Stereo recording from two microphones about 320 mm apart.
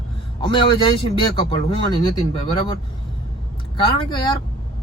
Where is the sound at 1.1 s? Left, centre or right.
Centre.